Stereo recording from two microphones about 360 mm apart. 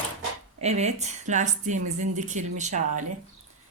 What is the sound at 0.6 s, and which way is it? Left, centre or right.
Speech, centre.